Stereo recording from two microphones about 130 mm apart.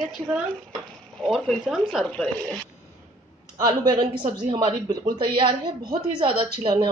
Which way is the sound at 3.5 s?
30° right (ahead or behind).